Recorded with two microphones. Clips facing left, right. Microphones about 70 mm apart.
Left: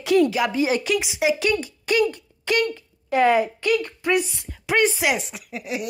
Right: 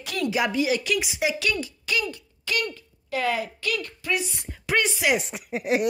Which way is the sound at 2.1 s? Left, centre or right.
Left.